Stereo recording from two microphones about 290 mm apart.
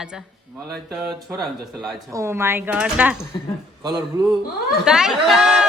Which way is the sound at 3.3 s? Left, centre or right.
Centre.